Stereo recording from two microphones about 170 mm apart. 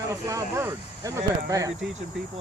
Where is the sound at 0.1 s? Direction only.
20° right (ahead or behind).